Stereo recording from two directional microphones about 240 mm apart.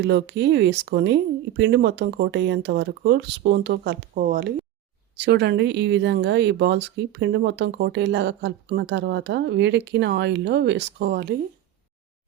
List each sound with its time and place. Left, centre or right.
0.0 s speech: right